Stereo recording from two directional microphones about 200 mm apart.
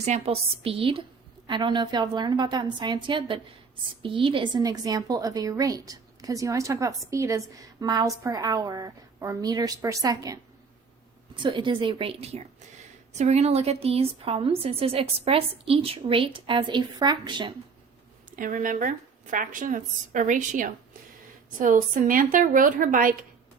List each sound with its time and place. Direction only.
0.0 s a woman's voice: 30° right (ahead or behind)
11.5 s a woman's voice: 25° right (ahead or behind)
18.3 s a woman's voice: 40° right (ahead or behind)